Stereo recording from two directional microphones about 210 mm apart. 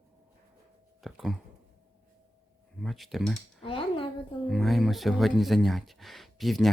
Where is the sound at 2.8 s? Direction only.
Centre (ahead or behind).